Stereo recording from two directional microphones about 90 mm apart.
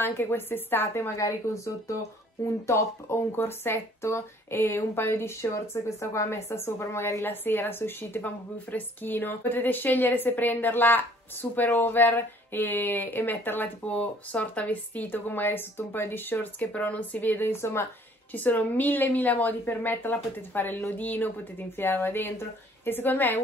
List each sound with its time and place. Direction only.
0.0 s speech: 25° left (ahead or behind)